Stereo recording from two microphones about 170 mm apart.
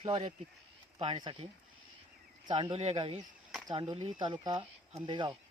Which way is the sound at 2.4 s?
30° right (ahead or behind).